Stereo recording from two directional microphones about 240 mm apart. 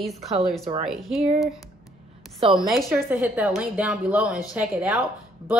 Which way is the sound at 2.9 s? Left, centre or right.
Centre.